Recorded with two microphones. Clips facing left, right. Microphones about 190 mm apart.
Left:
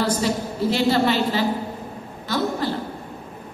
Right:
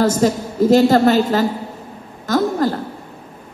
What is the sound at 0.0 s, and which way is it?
A woman's voice, 45° right (ahead or behind).